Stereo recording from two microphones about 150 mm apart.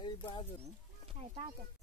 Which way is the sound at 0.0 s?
30° left (ahead or behind).